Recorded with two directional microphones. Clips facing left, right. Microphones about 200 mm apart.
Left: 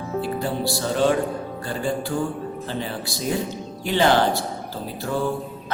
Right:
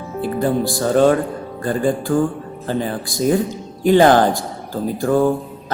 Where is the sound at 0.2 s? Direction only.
50° right (ahead or behind).